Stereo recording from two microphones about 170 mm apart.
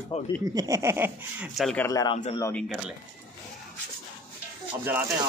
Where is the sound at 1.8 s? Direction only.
20° left (ahead or behind).